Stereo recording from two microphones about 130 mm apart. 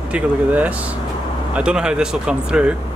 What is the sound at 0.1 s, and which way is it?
Speech, 10° right (ahead or behind).